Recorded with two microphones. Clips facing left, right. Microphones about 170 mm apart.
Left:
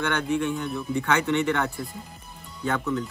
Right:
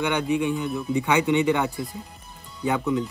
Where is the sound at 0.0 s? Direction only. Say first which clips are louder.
Right 2 dB; 10° right (ahead or behind).